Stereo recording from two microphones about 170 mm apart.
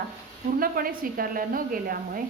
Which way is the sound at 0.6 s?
60° right (ahead or behind).